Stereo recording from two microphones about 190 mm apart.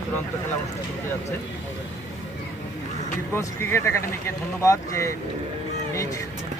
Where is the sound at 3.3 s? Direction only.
15° left (ahead or behind).